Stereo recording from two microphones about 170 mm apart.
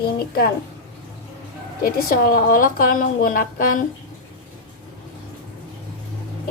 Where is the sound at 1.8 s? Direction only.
60° left (ahead or behind).